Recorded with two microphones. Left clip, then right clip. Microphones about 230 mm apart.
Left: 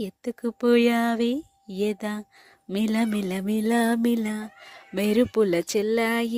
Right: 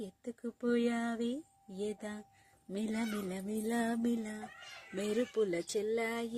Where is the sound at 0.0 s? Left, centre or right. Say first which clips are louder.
Left 13 dB; left.